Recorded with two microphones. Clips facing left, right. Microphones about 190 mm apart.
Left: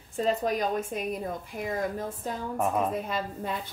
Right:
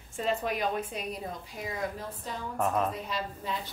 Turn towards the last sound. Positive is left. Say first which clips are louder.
# left 2 dB
turn(degrees=55)  # may be behind; listen again after turning